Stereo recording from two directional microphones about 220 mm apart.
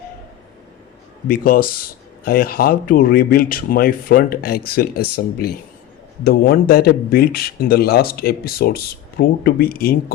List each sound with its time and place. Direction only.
1.3 s speech: 40° left (ahead or behind)